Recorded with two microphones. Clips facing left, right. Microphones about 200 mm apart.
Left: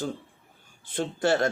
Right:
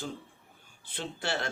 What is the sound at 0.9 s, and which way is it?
Speech, 50° left (ahead or behind).